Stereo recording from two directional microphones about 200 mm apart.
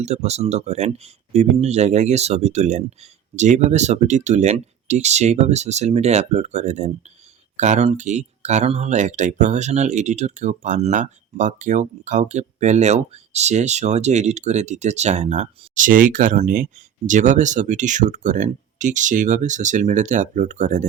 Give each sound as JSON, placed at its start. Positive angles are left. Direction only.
{"t": 0.0, "sound": "speech", "side_deg": -35}